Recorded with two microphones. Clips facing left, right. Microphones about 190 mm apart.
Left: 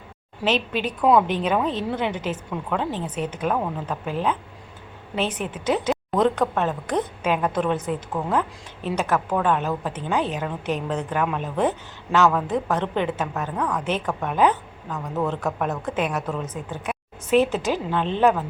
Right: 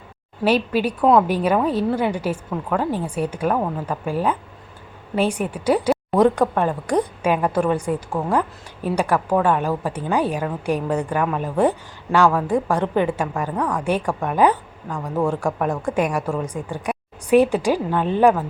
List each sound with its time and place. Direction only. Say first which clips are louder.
0.4 s a woman's voice: right 5 dB; 10° right (ahead or behind)